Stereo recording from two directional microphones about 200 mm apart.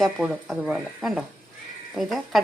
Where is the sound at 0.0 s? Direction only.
Centre (ahead or behind).